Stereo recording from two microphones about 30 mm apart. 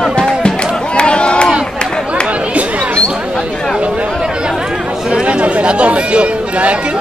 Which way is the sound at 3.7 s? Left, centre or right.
Right.